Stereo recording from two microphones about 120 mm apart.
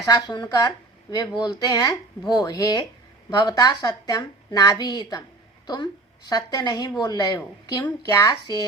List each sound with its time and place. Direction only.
0.0 s a woman's voice: 35° left (ahead or behind)